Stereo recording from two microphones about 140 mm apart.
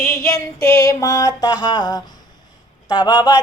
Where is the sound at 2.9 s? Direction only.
30° left (ahead or behind).